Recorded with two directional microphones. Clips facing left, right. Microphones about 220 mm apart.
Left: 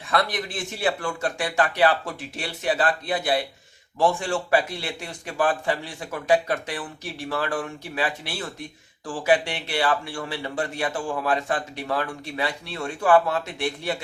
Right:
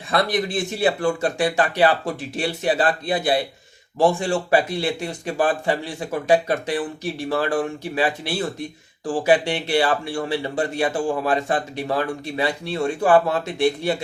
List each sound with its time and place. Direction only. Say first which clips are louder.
0.1 s a man's voice: right 4 dB; 30° right (ahead or behind)